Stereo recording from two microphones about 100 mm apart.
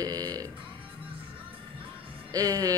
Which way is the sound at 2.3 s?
35° right (ahead or behind).